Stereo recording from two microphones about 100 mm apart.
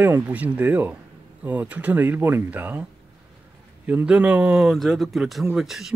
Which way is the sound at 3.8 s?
15° right (ahead or behind).